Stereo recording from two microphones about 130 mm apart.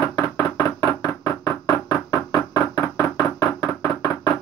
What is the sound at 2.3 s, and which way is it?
Knock, 30° left (ahead or behind).